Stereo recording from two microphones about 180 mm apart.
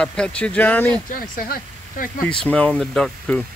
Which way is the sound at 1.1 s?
50° left (ahead or behind).